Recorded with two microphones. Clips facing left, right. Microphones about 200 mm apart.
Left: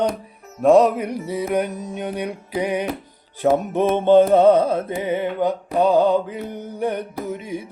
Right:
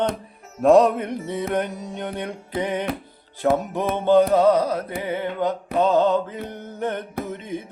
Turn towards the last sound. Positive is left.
turn(degrees=10)  # may be behind; listen again after turning